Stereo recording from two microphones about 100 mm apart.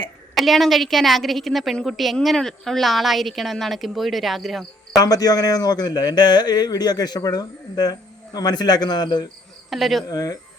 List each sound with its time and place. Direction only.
0.3 s a woman's voice: centre (ahead or behind)
4.9 s a man's voice: 40° left (ahead or behind)
9.6 s speech: centre (ahead or behind)
10.1 s speech: 40° left (ahead or behind)